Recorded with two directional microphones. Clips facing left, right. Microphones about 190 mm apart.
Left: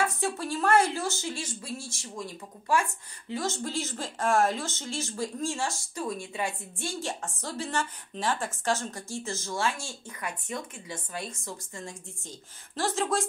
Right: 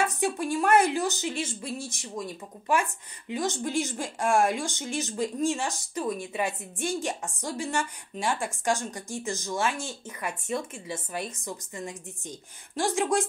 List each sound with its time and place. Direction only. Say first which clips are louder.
0.0 s speech: right 2 dB; 20° right (ahead or behind)
3.3 s speech: right 2 dB; 15° right (ahead or behind)